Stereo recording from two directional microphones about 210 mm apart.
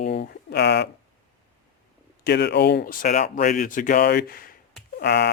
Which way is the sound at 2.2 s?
55° left (ahead or behind).